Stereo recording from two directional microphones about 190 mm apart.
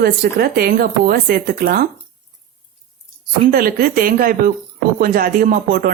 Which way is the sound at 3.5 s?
50° right (ahead or behind).